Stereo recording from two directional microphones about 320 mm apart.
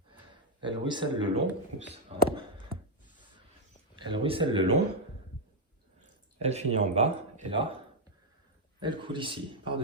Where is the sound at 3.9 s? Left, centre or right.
Centre.